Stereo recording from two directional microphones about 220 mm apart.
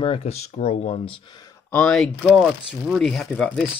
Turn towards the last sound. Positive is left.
turn(degrees=0)  # may be behind; listen again after turning